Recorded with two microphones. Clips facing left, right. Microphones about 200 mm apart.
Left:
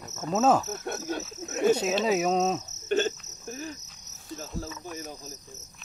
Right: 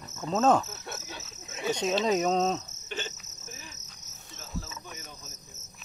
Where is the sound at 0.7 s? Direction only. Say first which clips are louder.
Left 10 dB; 50° left (ahead or behind).